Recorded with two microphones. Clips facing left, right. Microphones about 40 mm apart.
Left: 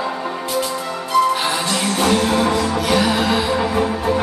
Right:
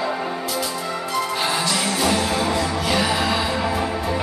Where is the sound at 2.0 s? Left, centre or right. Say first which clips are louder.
Left 6 dB; left.